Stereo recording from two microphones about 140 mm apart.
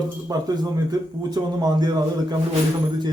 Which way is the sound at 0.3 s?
25° right (ahead or behind).